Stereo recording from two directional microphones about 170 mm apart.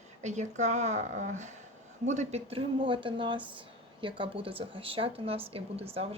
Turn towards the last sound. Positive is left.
turn(degrees=-35)  # may be behind; listen again after turning